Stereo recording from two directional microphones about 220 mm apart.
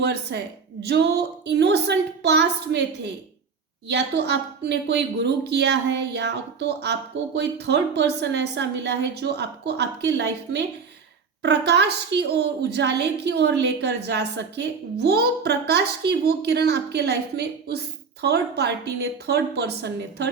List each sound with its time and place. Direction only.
0.0 s a woman's voice: 50° right (ahead or behind)
3.8 s a woman's voice: 50° right (ahead or behind)